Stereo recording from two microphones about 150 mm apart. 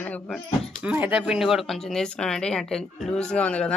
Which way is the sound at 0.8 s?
10° right (ahead or behind).